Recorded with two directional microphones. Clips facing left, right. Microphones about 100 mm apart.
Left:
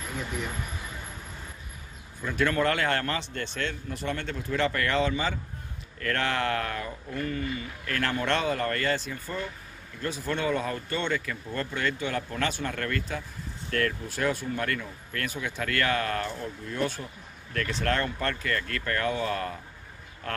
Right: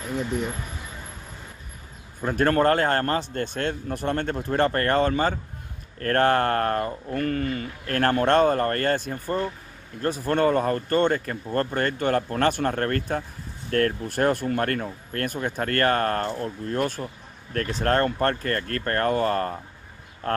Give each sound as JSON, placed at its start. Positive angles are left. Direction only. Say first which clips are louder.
{"t": 2.2, "sound": "speech", "louder": "right 6 dB", "side_deg": -45}